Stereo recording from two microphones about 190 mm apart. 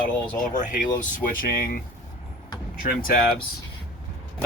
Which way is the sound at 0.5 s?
40° left (ahead or behind).